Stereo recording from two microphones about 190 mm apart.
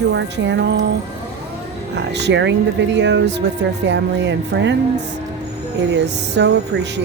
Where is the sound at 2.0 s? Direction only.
65° right (ahead or behind).